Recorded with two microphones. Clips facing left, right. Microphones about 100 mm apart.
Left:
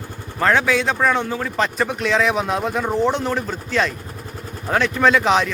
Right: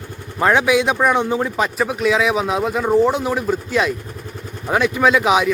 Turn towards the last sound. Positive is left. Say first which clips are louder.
# right 1 dB
turn(degrees=-5)  # may be behind; listen again after turning